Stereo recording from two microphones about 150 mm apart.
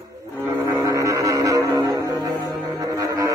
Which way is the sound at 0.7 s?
25° right (ahead or behind).